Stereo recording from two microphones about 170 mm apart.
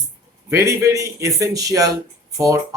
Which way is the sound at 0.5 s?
15° right (ahead or behind).